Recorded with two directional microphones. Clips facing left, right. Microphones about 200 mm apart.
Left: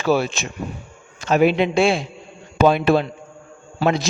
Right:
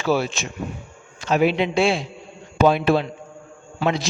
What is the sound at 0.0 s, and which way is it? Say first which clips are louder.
A man's voice: left 2 dB; 50° left (ahead or behind).